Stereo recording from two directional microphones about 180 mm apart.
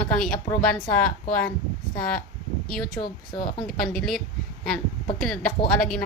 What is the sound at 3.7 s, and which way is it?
A woman's voice, centre (ahead or behind).